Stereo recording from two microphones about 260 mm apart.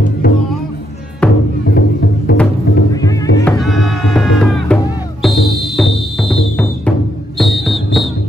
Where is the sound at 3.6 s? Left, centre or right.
Centre.